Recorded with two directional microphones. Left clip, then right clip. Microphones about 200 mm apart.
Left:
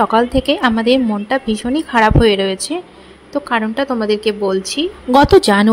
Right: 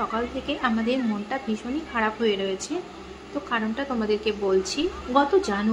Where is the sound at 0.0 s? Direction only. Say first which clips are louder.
Left 14 dB; 50° left (ahead or behind).